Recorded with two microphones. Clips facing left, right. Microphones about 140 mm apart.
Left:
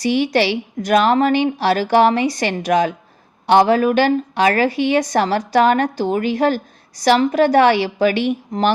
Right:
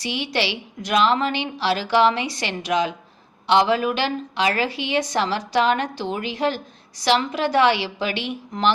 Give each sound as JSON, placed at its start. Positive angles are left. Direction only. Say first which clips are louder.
{"t": 0.0, "sound": "a woman's voice", "louder": "left 9 dB", "side_deg": 45}